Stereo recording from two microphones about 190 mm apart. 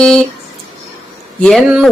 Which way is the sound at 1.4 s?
Centre (ahead or behind).